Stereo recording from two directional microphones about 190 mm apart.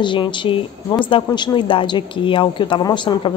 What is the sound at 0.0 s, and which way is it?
A woman's voice, 25° left (ahead or behind).